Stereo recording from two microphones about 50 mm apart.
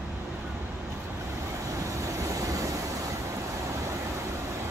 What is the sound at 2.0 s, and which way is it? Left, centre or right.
Vehicle, right.